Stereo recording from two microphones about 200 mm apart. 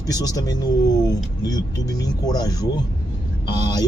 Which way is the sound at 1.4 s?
20° left (ahead or behind).